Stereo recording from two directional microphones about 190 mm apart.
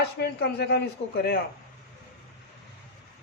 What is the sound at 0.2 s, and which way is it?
A man's voice, 60° left (ahead or behind).